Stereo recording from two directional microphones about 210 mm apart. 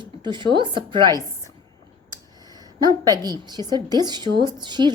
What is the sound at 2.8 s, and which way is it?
Speech, 20° right (ahead or behind).